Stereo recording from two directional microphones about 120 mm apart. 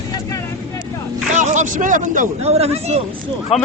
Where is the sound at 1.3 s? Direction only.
90° right; by 2.9 s 60° right (ahead or behind).